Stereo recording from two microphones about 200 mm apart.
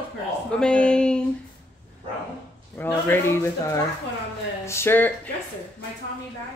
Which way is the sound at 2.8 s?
10° left (ahead or behind).